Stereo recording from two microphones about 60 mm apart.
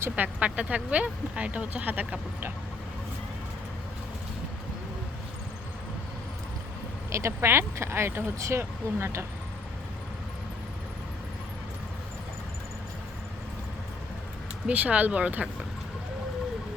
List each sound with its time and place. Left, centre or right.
0.2 s speech: right
7.1 s speech: right
14.7 s speech: right